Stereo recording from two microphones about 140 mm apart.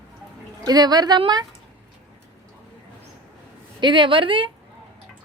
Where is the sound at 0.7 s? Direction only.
30° right (ahead or behind).